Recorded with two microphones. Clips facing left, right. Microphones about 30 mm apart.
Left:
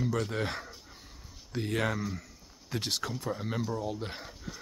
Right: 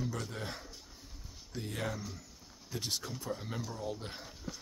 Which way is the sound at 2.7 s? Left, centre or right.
Left.